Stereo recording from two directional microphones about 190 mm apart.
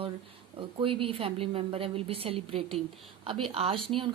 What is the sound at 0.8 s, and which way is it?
Speech, 30° right (ahead or behind).